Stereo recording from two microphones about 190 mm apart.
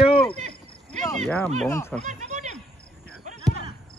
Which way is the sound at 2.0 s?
40° right (ahead or behind).